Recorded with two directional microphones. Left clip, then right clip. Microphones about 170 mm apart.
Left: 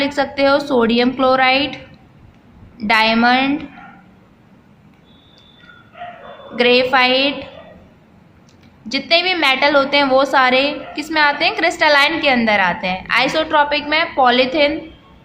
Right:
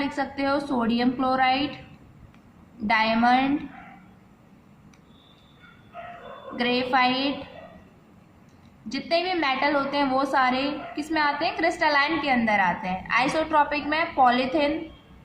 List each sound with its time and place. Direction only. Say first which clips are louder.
0.0 s a woman's voice: left 11 dB; 20° left (ahead or behind)
2.8 s a woman's voice: left 8 dB; 20° left (ahead or behind)
6.6 s a woman's voice: left 10 dB; 20° left (ahead or behind)
8.9 s a woman's voice: left 10 dB; 20° left (ahead or behind)